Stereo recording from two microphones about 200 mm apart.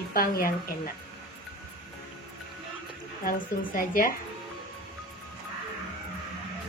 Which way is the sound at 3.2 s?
45° left (ahead or behind).